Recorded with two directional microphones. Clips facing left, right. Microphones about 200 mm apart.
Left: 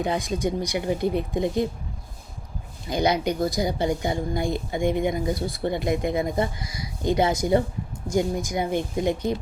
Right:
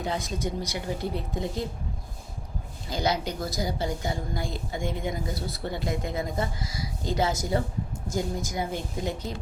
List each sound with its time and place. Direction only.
0.0 s speech: 15° left (ahead or behind)
2.9 s speech: 15° left (ahead or behind)